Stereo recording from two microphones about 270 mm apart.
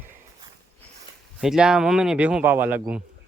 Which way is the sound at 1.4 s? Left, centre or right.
Centre.